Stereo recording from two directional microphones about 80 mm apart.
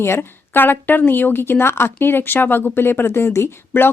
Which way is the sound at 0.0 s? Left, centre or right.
Left.